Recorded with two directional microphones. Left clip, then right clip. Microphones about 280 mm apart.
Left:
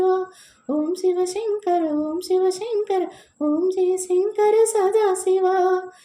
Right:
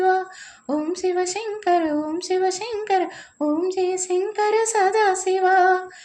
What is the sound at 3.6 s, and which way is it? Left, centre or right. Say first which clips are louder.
Speech: left 2 dB; right.